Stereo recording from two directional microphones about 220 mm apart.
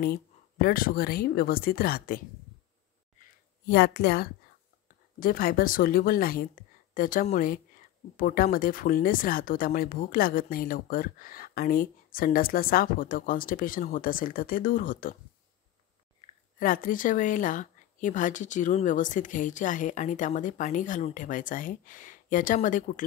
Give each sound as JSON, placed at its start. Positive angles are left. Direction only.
{"t": 0.0, "sound": "speech", "side_deg": 45}
{"t": 3.6, "sound": "speech", "side_deg": 50}
{"t": 16.5, "sound": "speech", "side_deg": 40}